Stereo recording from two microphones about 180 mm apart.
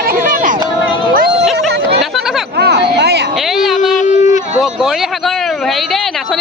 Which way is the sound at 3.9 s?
45° left (ahead or behind).